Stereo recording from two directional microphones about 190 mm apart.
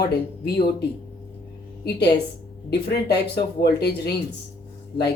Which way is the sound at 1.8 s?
60° left (ahead or behind).